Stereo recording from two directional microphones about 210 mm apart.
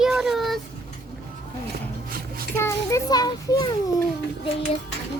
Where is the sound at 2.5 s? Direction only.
15° left (ahead or behind).